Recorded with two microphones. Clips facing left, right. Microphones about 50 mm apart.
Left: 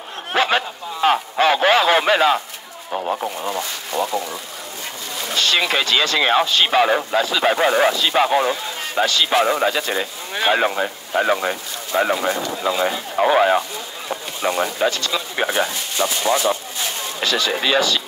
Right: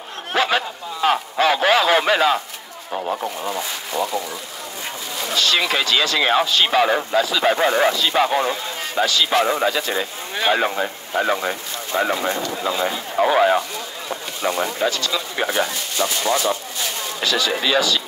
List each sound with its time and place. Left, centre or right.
0.3 s a sound: left
1.0 s radio: left
3.0 s speech: centre
5.3 s speech: left
8.3 s speech: centre
8.9 s speech: left
10.3 s speech: left
12.4 s speech: centre
13.3 s speech: left
14.0 s speech: left
17.2 s speech: left